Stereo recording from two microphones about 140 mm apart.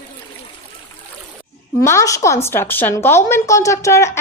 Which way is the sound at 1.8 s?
20° left (ahead or behind).